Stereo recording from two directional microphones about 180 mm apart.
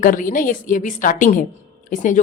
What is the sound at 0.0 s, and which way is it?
A woman's voice, 50° left (ahead or behind).